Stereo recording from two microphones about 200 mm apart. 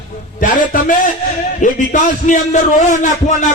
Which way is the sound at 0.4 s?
40° left (ahead or behind).